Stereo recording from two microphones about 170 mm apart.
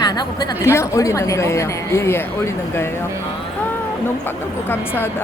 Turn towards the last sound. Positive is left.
turn(degrees=10)  # may be behind; listen again after turning